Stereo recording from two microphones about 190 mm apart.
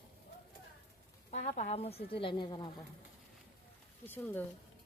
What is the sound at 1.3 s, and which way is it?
Speech, 35° left (ahead or behind).